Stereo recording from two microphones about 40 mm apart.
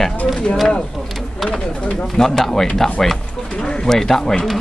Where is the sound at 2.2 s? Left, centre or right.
Centre.